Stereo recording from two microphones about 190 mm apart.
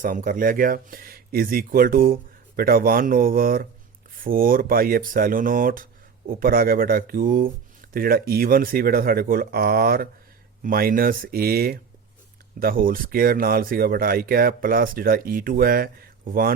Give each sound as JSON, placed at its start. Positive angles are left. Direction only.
{"t": 0.0, "sound": "speech", "side_deg": -45}